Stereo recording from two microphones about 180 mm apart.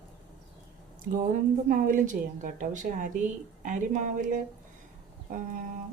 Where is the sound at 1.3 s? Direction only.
45° right (ahead or behind).